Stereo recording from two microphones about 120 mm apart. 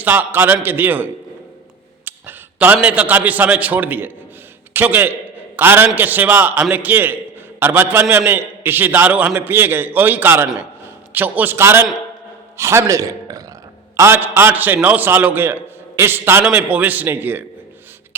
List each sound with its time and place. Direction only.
0.0 s a man's voice: 15° right (ahead or behind)
2.0 s a sound: 15° right (ahead or behind)
2.8 s a man's voice: 10° right (ahead or behind)